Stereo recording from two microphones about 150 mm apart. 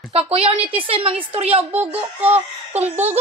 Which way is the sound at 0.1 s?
40° right (ahead or behind).